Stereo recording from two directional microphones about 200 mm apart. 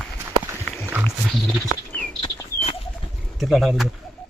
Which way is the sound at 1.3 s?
Centre (ahead or behind).